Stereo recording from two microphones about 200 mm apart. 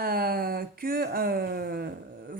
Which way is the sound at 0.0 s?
50° right (ahead or behind).